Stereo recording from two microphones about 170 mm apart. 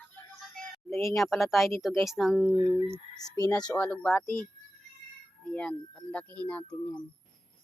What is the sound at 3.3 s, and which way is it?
Speech, 20° left (ahead or behind).